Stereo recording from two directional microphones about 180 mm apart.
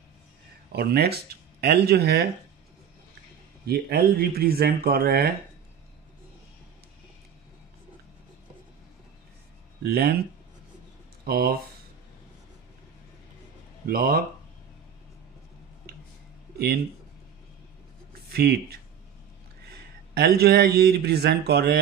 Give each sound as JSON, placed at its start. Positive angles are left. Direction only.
{"t": 0.7, "sound": "speech", "side_deg": -60}
{"t": 3.6, "sound": "speech", "side_deg": -60}
{"t": 9.8, "sound": "speech", "side_deg": -60}
{"t": 11.2, "sound": "speech", "side_deg": -60}
{"t": 13.8, "sound": "speech", "side_deg": -55}
{"t": 18.3, "sound": "speech", "side_deg": -60}